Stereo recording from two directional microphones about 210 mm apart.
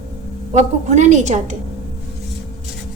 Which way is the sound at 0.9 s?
35° right (ahead or behind).